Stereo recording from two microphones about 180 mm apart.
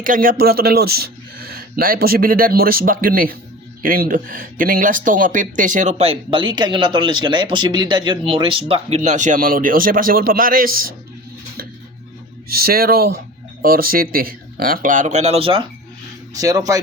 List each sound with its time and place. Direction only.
0.0 s speech: 50° right (ahead or behind); by 9.0 s 30° right (ahead or behind)
9.0 s speech: 45° right (ahead or behind)
12.5 s speech: 55° right (ahead or behind); by 15.6 s 30° right (ahead or behind)
16.3 s speech: 20° right (ahead or behind)